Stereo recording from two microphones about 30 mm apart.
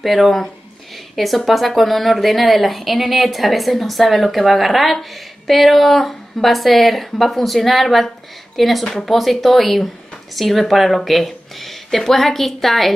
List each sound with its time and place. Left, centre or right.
0.0 s a woman's voice: centre